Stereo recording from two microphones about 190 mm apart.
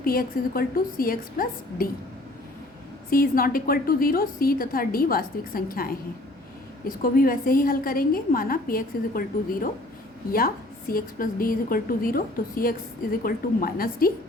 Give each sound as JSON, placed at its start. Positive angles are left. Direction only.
{"t": 0.0, "sound": "a woman's voice", "side_deg": 50}
{"t": 3.1, "sound": "a woman's voice", "side_deg": 50}